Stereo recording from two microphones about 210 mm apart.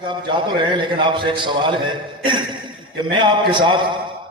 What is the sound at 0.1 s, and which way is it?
A man's voice, 20° right (ahead or behind).